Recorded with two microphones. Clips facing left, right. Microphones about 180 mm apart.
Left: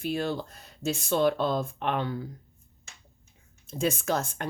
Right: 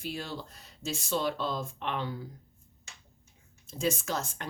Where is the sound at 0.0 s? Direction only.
55° left (ahead or behind).